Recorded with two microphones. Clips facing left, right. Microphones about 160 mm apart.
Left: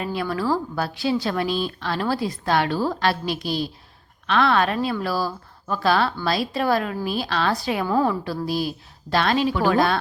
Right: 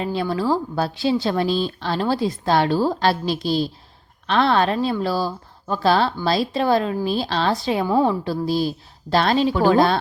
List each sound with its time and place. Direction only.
0.0 s speech: 25° right (ahead or behind)